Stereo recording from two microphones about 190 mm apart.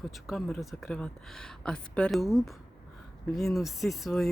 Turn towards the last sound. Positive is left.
turn(degrees=0)  # may be behind; listen again after turning